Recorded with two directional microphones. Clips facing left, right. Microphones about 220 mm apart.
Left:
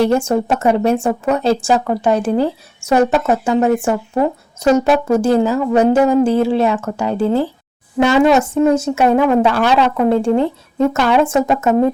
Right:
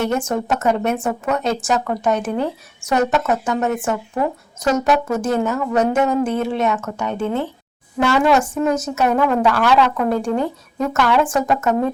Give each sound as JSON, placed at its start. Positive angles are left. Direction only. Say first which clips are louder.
{"t": 0.0, "sound": "a woman's voice", "louder": "left 6 dB", "side_deg": 30}
{"t": 7.9, "sound": "a woman's voice", "louder": "left 4 dB", "side_deg": 20}